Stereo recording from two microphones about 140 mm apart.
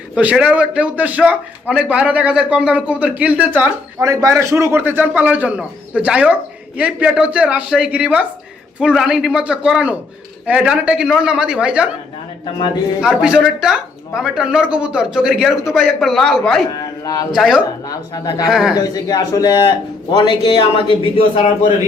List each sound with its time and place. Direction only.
0.2 s a man's voice: 10° right (ahead or behind)
4.0 s a man's voice: 25° right (ahead or behind); by 11.9 s 5° right (ahead or behind)
13.0 s speech: 5° right (ahead or behind)
16.7 s a sound: 25° left (ahead or behind)
17.3 s speech: centre (ahead or behind)
17.8 s a woman's voice: 25° left (ahead or behind)
18.4 s speech: 5° right (ahead or behind)
18.7 s a man's voice: 30° left (ahead or behind)